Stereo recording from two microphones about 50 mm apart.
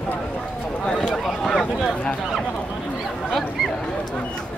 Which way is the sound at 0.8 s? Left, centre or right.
Centre.